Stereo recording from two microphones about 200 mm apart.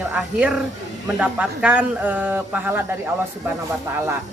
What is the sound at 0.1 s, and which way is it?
Speech, 5° right (ahead or behind).